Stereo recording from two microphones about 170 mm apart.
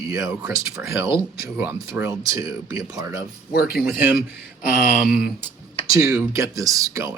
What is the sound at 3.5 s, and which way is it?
Speech, 60° left (ahead or behind).